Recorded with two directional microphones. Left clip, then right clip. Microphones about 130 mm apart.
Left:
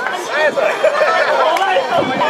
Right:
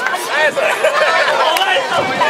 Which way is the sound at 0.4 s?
20° right (ahead or behind).